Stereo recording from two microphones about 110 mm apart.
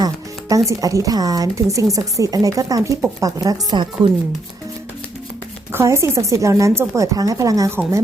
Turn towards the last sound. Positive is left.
turn(degrees=-30)  # may be behind; listen again after turning